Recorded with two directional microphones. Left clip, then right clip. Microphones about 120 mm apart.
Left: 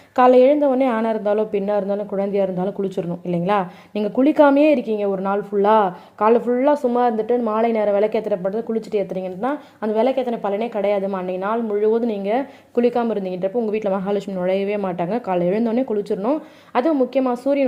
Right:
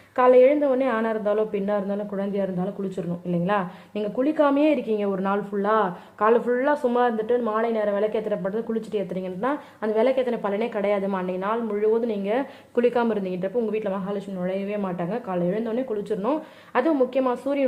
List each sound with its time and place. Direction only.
0.2 s a woman's voice: 25° left (ahead or behind)
4.2 s a woman's voice: 45° left (ahead or behind)
4.7 s a woman's voice: 15° left (ahead or behind)
5.6 s speech: 35° left (ahead or behind)
6.1 s a woman's voice: 20° left (ahead or behind)
7.6 s speech: 40° left (ahead or behind)
8.3 s a woman's voice: 15° left (ahead or behind)
11.3 s a woman's voice: 20° left (ahead or behind)
13.7 s speech: 30° left (ahead or behind)
14.1 s a woman's voice: 50° left (ahead or behind)
16.2 s a woman's voice: 15° left (ahead or behind)